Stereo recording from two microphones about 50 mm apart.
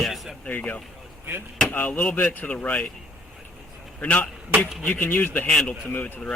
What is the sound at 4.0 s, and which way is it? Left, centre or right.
Speech, left.